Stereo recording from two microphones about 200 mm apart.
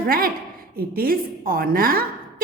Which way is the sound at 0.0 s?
45° right (ahead or behind).